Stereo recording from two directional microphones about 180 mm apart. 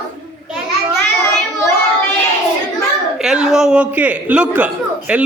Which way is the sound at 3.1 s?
5° right (ahead or behind).